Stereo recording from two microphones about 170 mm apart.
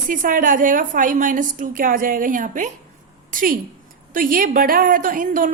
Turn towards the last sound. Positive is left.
turn(degrees=-55)  # may be behind; listen again after turning